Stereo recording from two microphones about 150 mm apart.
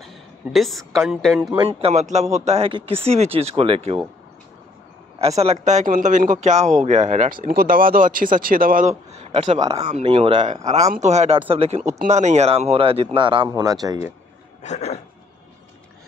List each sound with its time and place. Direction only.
0.0 s a woman's voice: centre (ahead or behind)
1.6 s speech: 40° right (ahead or behind)
5.2 s speech: 45° right (ahead or behind); by 8.9 s 70° right (ahead or behind)
9.1 s a sound: 45° right (ahead or behind)
9.7 s speech: 45° right (ahead or behind)
10.5 s speech: 50° right (ahead or behind); by 13.9 s 25° right (ahead or behind)
14.6 s a sound: 50° left (ahead or behind)